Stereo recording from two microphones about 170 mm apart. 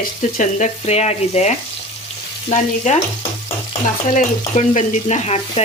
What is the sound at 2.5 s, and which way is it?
Stir, 40° left (ahead or behind).